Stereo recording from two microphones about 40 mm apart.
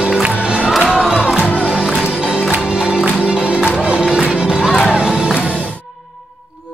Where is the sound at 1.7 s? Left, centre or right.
Right.